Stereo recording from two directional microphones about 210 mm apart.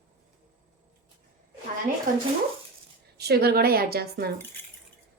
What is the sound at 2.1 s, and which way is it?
Speech, 40° right (ahead or behind).